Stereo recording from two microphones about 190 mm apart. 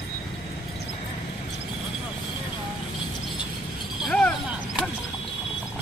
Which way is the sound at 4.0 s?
Centre (ahead or behind).